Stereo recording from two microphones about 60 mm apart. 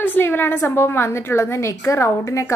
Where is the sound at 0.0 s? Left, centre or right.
Left.